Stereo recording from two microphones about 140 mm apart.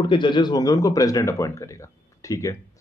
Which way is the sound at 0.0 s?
35° left (ahead or behind).